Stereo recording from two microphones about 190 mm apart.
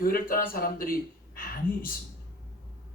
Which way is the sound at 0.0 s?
50° left (ahead or behind).